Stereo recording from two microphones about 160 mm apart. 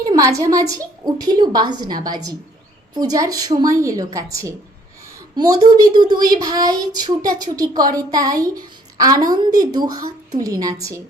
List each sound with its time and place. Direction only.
0.0 s speech: 20° right (ahead or behind)